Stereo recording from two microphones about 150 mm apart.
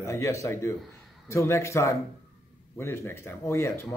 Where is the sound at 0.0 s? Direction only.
20° left (ahead or behind).